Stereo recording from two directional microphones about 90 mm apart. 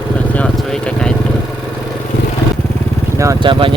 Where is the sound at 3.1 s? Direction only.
35° right (ahead or behind).